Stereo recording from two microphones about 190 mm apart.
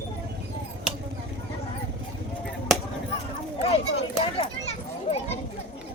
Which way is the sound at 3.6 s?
30° left (ahead or behind).